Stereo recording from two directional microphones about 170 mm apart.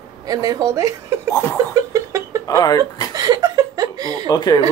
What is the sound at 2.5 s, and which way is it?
Speech, 20° left (ahead or behind).